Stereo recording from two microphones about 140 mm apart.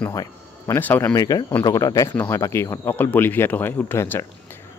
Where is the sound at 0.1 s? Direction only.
25° left (ahead or behind).